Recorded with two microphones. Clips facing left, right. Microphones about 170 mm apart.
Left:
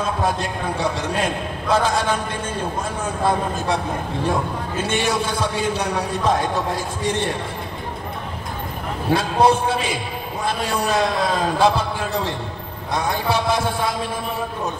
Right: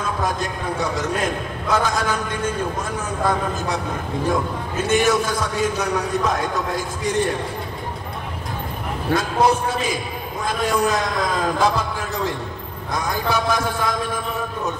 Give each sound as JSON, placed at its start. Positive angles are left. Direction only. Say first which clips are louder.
{"t": 0.0, "sound": "a man's voice", "louder": "left 2 dB", "side_deg": 30}
{"t": 3.3, "sound": "a man's voice", "louder": "left 2 dB", "side_deg": 30}
{"t": 4.8, "sound": "a man's voice", "louder": "right 5 dB", "side_deg": 30}
{"t": 9.1, "sound": "a man's voice", "louder": "left 2 dB", "side_deg": 30}